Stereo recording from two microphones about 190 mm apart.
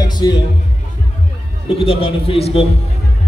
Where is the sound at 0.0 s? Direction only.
20° left (ahead or behind).